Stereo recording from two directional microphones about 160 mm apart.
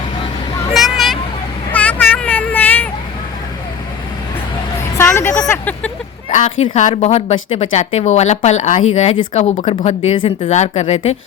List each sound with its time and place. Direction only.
0.7 s vehicle: centre (ahead or behind)
4.9 s vehicle: 20° left (ahead or behind)
5.3 s a sound: 10° left (ahead or behind)
6.7 s speech: 45° left (ahead or behind)